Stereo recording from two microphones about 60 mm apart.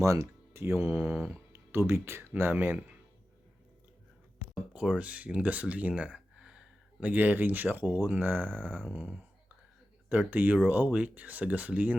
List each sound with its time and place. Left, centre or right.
0.0 s music: right
0.6 s mantra: right
2.4 s speech: right
4.7 s speech: right
6.1 s a sound: centre
7.1 s speech: right
8.9 s speech: right